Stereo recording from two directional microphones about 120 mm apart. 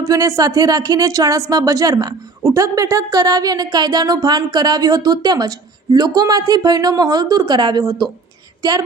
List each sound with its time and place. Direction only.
0.1 s speech: 30° right (ahead or behind)
8.6 s female singing: 30° right (ahead or behind)